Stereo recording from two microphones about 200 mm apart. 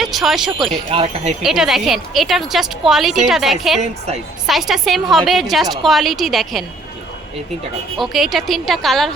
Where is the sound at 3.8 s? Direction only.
35° right (ahead or behind).